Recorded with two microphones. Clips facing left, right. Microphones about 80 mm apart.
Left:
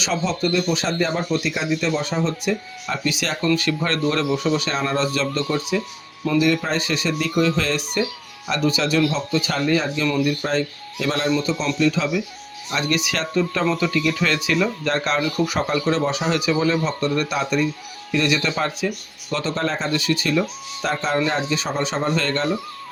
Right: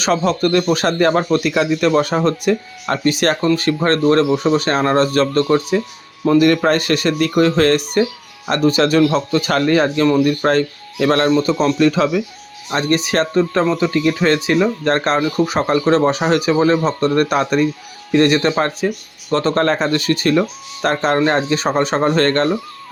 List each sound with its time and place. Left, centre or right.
0.0 s a man's voice: right
3.0 s speech: right
6.3 s a man's voice: right
12.7 s speech: right